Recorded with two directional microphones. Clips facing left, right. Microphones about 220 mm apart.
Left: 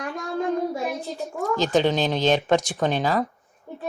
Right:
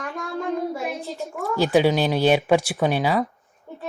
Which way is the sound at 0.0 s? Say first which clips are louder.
Left 1 dB; 15° left (ahead or behind).